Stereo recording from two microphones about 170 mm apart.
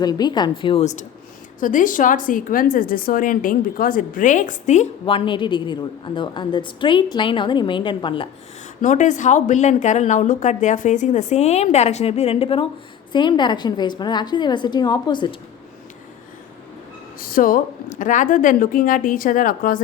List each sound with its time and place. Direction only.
0.0 s a woman's voice: 25° left (ahead or behind)
8.8 s a woman's voice: 45° left (ahead or behind); by 15.4 s 25° left (ahead or behind)
17.2 s a woman's voice: 55° left (ahead or behind)